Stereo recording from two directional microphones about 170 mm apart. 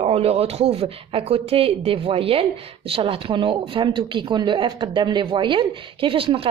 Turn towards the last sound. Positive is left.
turn(degrees=-30)  # may be behind; listen again after turning